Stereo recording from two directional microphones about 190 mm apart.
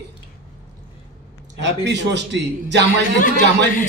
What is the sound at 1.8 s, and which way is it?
A man's voice, 65° right (ahead or behind).